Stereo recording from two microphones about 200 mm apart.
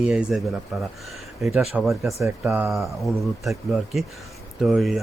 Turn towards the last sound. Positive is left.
turn(degrees=0)  # may be behind; listen again after turning